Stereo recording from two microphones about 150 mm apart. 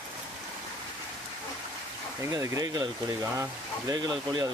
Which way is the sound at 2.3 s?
25° right (ahead or behind).